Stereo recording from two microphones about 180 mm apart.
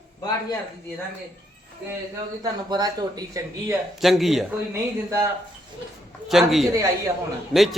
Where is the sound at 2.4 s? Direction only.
20° right (ahead or behind).